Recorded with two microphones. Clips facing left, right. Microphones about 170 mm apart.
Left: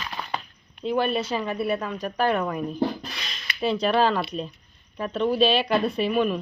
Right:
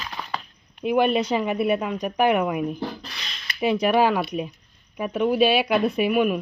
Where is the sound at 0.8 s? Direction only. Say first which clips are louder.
Right 4 dB; 15° right (ahead or behind).